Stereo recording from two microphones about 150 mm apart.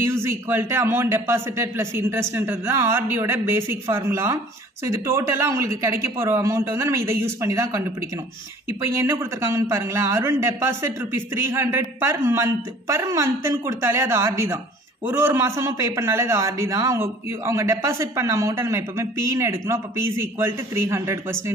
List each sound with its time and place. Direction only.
0.0 s a man's voice: 15° right (ahead or behind)